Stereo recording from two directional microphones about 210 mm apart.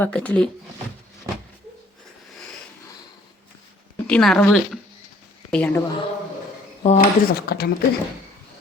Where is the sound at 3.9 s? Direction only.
5° left (ahead or behind).